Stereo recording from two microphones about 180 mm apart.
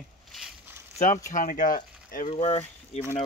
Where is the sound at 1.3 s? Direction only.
45° left (ahead or behind).